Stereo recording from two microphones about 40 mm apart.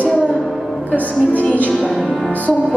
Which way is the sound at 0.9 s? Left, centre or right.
Left.